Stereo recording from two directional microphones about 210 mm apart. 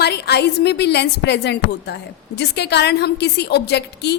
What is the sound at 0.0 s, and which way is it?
A woman's voice, 50° left (ahead or behind).